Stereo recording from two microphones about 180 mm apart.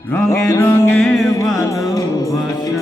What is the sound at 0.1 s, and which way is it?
Mantra, 15° left (ahead or behind).